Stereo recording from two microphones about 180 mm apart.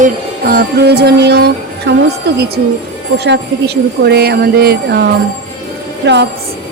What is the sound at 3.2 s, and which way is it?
Speech, 70° right (ahead or behind).